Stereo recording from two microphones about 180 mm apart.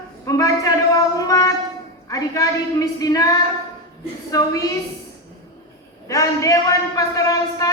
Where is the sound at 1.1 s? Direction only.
20° left (ahead or behind).